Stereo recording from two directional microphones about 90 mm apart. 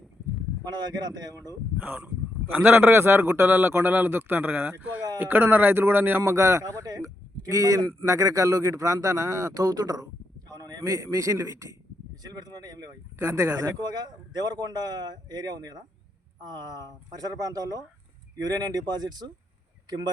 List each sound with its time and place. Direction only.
0.6 s speech: 50° right (ahead or behind)
1.8 s a man's voice: 20° right (ahead or behind); by 11.8 s 35° right (ahead or behind)
12.2 s speech: 45° right (ahead or behind)